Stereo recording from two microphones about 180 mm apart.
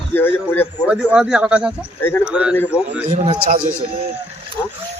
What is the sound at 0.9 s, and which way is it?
Speech, 5° right (ahead or behind).